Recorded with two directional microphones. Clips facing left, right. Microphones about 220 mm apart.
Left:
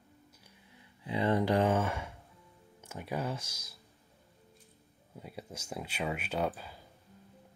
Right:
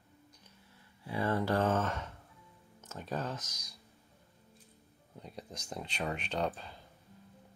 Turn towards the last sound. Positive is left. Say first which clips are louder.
# left 1 dB
turn(degrees=5)  # may be behind; listen again after turning